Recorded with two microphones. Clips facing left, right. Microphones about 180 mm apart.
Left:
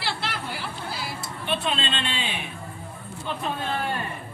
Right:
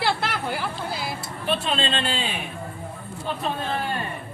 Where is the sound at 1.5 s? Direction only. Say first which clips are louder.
Right 3 dB; 40° right (ahead or behind).